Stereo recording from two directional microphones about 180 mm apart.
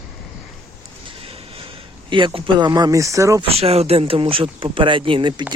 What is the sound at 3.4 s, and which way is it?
Speech, 35° right (ahead or behind).